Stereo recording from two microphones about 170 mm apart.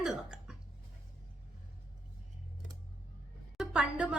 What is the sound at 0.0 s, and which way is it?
Hiccup, 5° right (ahead or behind).